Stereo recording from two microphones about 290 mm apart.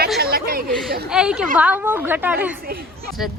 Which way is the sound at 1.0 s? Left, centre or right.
Centre.